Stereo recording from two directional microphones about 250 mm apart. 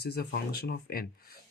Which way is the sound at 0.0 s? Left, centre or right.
Left.